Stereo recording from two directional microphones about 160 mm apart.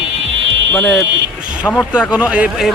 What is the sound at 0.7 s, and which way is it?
Speech, 10° left (ahead or behind).